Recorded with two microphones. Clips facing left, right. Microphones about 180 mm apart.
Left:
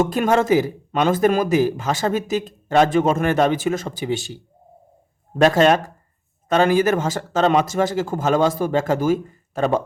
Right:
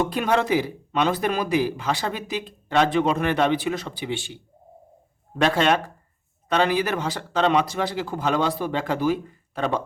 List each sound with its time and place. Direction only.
0.0 s a man's voice: 45° left (ahead or behind)